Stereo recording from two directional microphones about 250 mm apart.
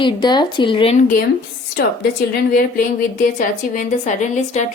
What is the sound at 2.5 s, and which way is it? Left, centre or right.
A woman's voice, left.